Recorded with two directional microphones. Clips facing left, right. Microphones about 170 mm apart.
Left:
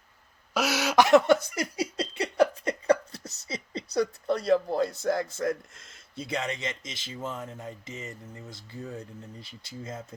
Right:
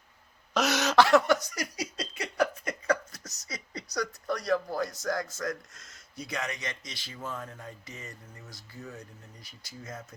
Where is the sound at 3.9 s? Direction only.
25° left (ahead or behind).